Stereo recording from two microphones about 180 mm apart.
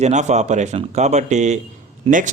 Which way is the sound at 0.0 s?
40° right (ahead or behind).